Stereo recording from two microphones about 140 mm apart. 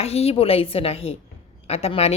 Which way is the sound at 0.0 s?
45° left (ahead or behind).